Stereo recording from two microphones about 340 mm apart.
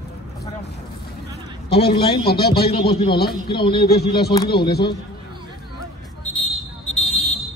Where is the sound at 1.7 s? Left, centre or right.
Left.